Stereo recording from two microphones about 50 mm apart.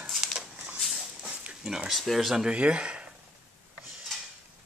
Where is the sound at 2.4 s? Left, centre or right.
Right.